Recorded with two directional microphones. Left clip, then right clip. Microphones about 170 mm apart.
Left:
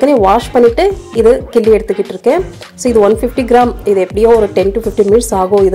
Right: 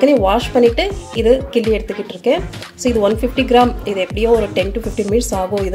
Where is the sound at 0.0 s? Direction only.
30° left (ahead or behind).